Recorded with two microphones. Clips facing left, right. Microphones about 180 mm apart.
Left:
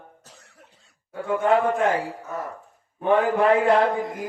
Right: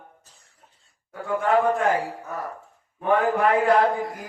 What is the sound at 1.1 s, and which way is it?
Speech, 20° left (ahead or behind).